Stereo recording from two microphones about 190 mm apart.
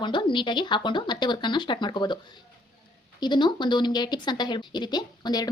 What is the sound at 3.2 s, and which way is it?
A woman's voice, 25° left (ahead or behind).